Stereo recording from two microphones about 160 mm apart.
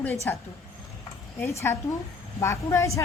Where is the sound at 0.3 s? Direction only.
10° left (ahead or behind).